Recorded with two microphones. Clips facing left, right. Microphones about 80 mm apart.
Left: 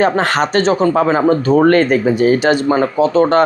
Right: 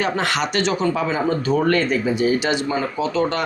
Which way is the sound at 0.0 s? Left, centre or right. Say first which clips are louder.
Left 7 dB; left.